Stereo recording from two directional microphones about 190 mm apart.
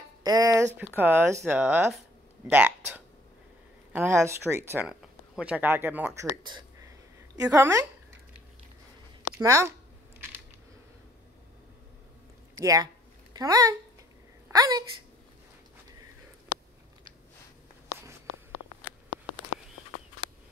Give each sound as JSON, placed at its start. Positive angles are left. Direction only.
{"t": 0.2, "sound": "speech", "side_deg": -20}
{"t": 7.3, "sound": "speech", "side_deg": -15}
{"t": 9.4, "sound": "speech", "side_deg": -15}
{"t": 12.5, "sound": "a sound", "side_deg": -20}